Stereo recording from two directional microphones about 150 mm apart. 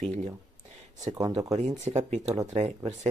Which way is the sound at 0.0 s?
50° right (ahead or behind).